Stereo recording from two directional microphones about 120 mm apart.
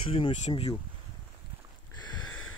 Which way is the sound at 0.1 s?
50° left (ahead or behind).